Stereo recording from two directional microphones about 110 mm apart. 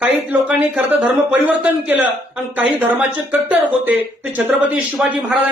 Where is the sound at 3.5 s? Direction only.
15° right (ahead or behind).